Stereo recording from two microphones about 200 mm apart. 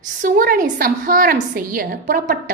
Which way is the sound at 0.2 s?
45° right (ahead or behind).